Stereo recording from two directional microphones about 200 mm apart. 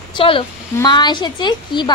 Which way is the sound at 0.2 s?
25° left (ahead or behind).